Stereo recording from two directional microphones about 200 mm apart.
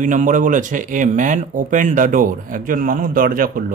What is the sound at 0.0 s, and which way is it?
Speech, 40° right (ahead or behind).